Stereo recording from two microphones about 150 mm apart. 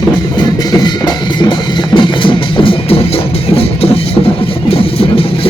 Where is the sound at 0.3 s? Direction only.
25° left (ahead or behind).